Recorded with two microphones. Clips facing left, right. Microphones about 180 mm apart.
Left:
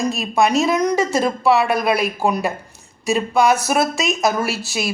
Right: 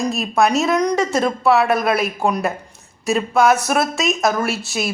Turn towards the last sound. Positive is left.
turn(degrees=0)  # may be behind; listen again after turning